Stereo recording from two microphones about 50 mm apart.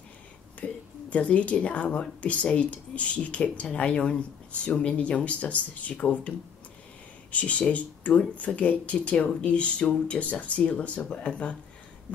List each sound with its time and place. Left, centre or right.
0.6 s speech: left